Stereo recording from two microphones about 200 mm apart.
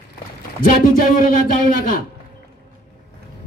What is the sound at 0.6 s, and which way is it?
Music, 40° left (ahead or behind).